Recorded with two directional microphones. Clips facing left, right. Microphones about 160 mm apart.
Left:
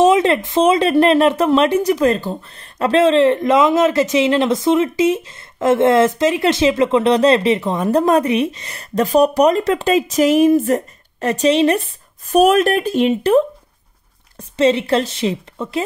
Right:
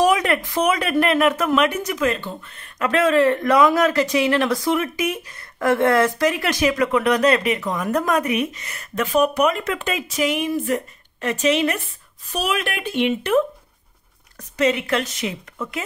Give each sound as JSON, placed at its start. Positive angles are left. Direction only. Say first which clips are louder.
{"t": 0.0, "sound": "speech", "louder": "left 5 dB", "side_deg": 25}
{"t": 12.3, "sound": "speech", "louder": "left 12 dB", "side_deg": 50}